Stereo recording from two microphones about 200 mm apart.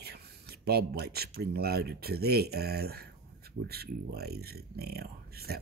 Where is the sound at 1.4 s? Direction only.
55° right (ahead or behind).